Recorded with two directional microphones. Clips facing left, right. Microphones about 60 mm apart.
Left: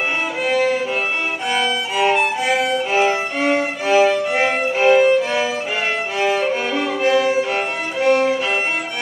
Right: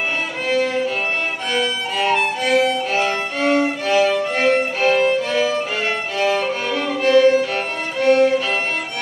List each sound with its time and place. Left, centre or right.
0.5 s violin: centre